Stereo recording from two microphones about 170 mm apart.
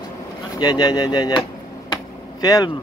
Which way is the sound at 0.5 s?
25° left (ahead or behind).